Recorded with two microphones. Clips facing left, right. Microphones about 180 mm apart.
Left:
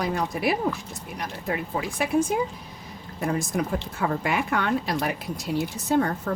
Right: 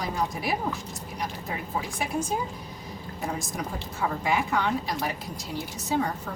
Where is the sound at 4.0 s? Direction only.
65° left (ahead or behind).